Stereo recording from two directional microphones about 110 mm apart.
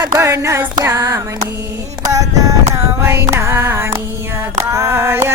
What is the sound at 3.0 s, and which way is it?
Music, 25° right (ahead or behind).